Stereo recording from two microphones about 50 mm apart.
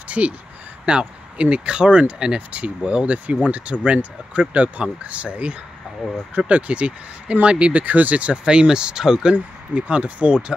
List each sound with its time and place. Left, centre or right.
0.2 s speech: right